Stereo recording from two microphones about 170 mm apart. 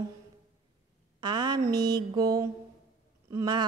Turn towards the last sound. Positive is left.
turn(degrees=-25)  # may be behind; listen again after turning